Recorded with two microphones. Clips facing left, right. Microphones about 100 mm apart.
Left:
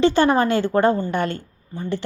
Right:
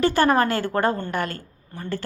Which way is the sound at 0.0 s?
20° left (ahead or behind).